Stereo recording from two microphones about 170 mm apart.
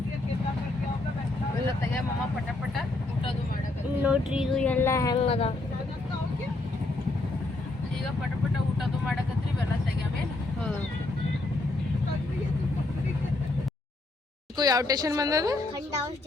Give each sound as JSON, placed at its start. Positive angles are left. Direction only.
{"t": 4.0, "sound": "speech", "side_deg": -5}
{"t": 4.6, "sound": "a sound", "side_deg": 10}
{"t": 5.1, "sound": "speech", "side_deg": 35}
{"t": 14.5, "sound": "a woman's voice", "side_deg": -20}